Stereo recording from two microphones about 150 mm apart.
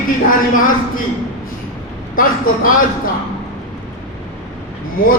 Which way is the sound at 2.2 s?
70° left (ahead or behind).